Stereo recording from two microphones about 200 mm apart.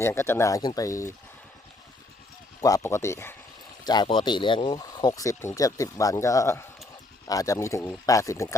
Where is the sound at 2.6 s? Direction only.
15° left (ahead or behind).